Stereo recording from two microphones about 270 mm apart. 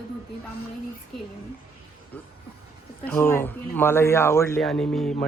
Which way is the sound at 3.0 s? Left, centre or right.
Centre.